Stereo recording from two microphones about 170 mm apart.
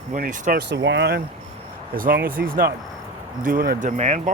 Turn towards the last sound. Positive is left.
turn(degrees=-40)  # may be behind; listen again after turning